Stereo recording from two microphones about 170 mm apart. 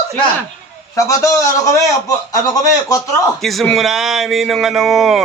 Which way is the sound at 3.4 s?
Centre (ahead or behind).